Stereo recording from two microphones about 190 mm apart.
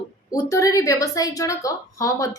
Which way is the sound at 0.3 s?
20° left (ahead or behind).